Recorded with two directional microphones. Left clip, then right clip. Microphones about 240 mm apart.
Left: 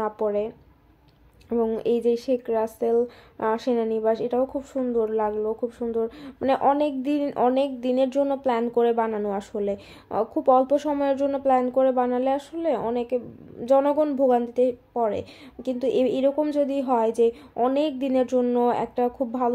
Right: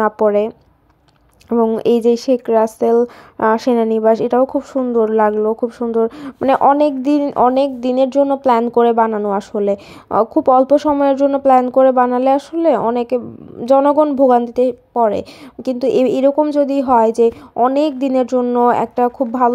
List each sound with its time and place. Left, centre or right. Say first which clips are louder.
0.0 s speech: right 11 dB; right
1.5 s speech: right 9 dB; right